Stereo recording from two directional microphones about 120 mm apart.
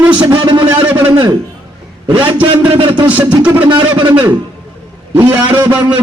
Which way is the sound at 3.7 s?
40° right (ahead or behind).